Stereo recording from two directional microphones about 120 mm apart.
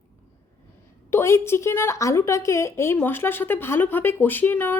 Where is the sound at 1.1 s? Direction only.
20° left (ahead or behind).